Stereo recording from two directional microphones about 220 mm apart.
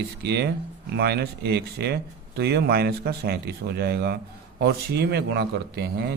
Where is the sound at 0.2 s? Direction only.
50° right (ahead or behind).